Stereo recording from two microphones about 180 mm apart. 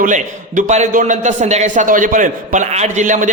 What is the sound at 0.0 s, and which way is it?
A man's voice, 45° right (ahead or behind).